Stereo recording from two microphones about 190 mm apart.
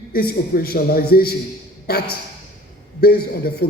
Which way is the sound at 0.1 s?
50° left (ahead or behind).